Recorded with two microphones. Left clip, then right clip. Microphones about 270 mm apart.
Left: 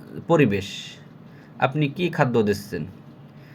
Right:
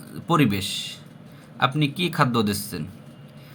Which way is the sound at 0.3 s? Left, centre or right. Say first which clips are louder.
Left 2 dB; centre.